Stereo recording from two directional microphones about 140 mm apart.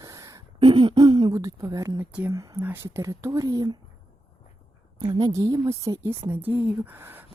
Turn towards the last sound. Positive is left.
turn(degrees=-15)  # may be behind; listen again after turning